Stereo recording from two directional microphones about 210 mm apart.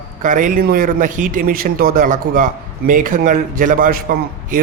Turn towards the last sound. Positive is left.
turn(degrees=-40)  # may be behind; listen again after turning